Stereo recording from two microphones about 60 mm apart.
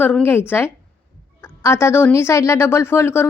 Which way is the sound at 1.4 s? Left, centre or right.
Left.